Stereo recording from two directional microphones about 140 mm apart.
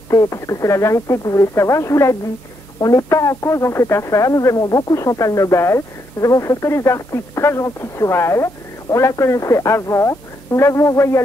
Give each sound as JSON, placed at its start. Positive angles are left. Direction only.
{"t": 0.1, "sound": "speech", "side_deg": 25}